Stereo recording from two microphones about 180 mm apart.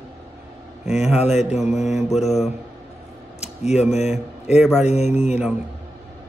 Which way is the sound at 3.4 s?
40° left (ahead or behind).